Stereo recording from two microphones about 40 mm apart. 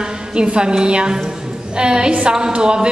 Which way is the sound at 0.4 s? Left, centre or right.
Right.